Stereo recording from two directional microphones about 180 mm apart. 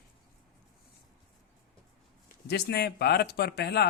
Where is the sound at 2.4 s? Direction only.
65° left (ahead or behind).